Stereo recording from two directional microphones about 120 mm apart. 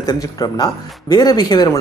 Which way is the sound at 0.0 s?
30° left (ahead or behind).